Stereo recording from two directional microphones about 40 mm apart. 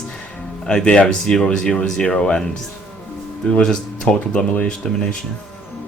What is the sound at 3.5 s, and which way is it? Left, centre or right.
Speech, centre.